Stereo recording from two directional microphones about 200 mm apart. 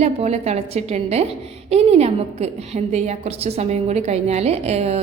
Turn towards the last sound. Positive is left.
turn(degrees=-30)  # may be behind; listen again after turning